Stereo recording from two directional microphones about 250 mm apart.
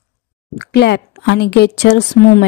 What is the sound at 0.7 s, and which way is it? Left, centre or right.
Speech, left.